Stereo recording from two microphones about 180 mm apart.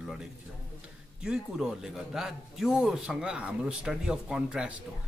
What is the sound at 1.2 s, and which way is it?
A man's voice, 5° right (ahead or behind).